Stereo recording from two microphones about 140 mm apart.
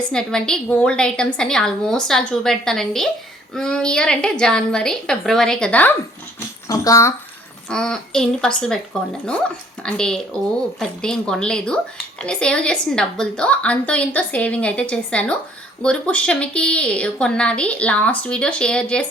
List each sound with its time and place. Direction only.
0.1 s a woman's voice: 5° left (ahead or behind)
6.7 s a child's voice: 25° left (ahead or behind)
7.7 s a woman's voice: 5° left (ahead or behind)